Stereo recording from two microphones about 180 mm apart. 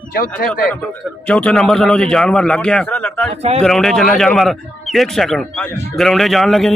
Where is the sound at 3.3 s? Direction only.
35° right (ahead or behind).